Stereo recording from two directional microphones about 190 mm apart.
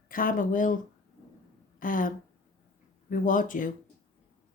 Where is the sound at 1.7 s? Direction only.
45° left (ahead or behind).